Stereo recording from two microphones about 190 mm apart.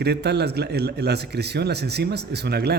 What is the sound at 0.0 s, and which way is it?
A man's voice, 60° right (ahead or behind).